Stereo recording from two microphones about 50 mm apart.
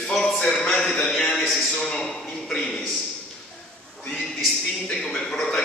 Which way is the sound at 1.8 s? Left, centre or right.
Centre.